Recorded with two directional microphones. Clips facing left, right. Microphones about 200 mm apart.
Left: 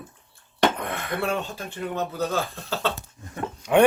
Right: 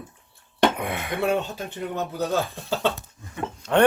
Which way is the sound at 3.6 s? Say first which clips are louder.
Left 2 dB; 15° left (ahead or behind).